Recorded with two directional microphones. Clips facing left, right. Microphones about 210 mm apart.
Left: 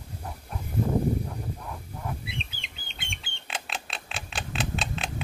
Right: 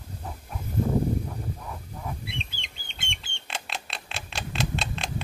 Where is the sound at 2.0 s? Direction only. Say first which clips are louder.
Even; centre (ahead or behind).